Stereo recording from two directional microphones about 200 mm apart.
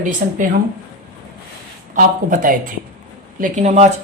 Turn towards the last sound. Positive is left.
turn(degrees=-35)  # may be behind; listen again after turning